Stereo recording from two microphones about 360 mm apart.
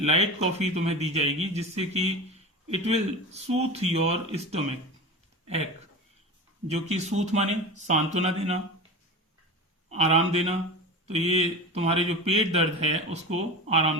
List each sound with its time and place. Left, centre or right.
0.0 s speech: centre
6.7 s speech: centre
9.9 s speech: centre